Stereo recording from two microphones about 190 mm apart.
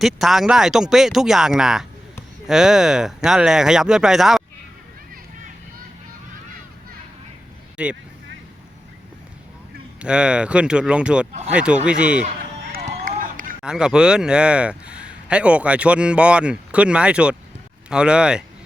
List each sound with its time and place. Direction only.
0.0 s a man's voice: centre (ahead or behind)
7.8 s a man's voice: 5° right (ahead or behind)
10.0 s a man's voice: 5° right (ahead or behind)
12.7 s run: 45° right (ahead or behind)
13.6 s a man's voice: 5° right (ahead or behind)